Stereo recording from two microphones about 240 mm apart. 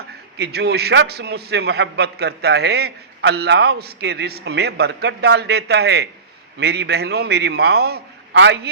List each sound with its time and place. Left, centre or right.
0.3 s a man's voice: right